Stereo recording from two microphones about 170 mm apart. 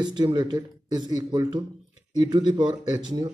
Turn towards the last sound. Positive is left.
turn(degrees=-25)  # may be behind; listen again after turning